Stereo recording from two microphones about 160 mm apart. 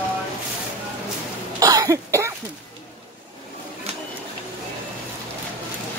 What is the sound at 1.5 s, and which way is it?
Cough, 20° right (ahead or behind).